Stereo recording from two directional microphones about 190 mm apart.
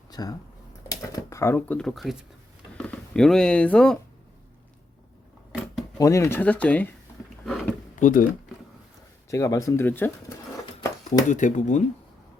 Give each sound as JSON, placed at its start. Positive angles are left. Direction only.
{"t": 0.1, "sound": "speech", "side_deg": 20}
{"t": 6.0, "sound": "speech", "side_deg": 15}
{"t": 7.4, "sound": "a sound", "side_deg": 0}
{"t": 8.0, "sound": "speech", "side_deg": 45}
{"t": 9.3, "sound": "speech", "side_deg": 15}
{"t": 10.8, "sound": "a sound", "side_deg": 20}
{"t": 11.3, "sound": "speech", "side_deg": 40}